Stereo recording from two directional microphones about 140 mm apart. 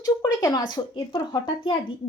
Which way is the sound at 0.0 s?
25° left (ahead or behind).